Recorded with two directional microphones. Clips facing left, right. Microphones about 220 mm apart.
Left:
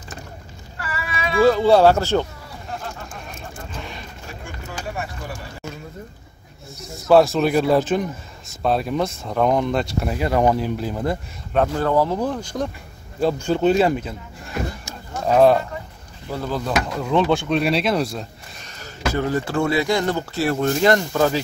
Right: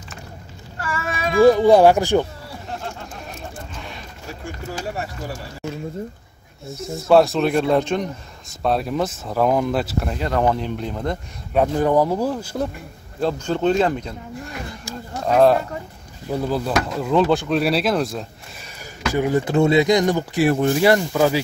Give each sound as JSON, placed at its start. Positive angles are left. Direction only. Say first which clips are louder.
{"t": 0.7, "sound": "a sound", "louder": "right 3 dB", "side_deg": -45}
{"t": 1.4, "sound": "speech", "louder": "right 2 dB", "side_deg": -15}
{"t": 4.5, "sound": "a sound", "louder": "right 4 dB", "side_deg": -35}
{"t": 6.9, "sound": "speech", "louder": "even", "side_deg": 0}
{"t": 10.0, "sound": "speech", "louder": "left 4 dB", "side_deg": 10}
{"t": 11.5, "sound": "speech", "louder": "right 2 dB", "side_deg": -15}
{"t": 13.2, "sound": "speech", "louder": "left 2 dB", "side_deg": 5}
{"t": 15.2, "sound": "speech", "louder": "even", "side_deg": 0}
{"t": 16.3, "sound": "speech", "louder": "right 3 dB", "side_deg": -15}
{"t": 19.1, "sound": "speech", "louder": "right 4 dB", "side_deg": -15}